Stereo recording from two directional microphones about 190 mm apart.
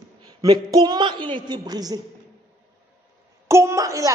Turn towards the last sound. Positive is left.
turn(degrees=-15)  # may be behind; listen again after turning